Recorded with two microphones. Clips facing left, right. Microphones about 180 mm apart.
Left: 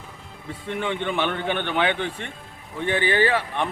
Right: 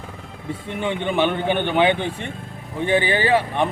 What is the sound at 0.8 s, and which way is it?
A man's voice, 15° right (ahead or behind).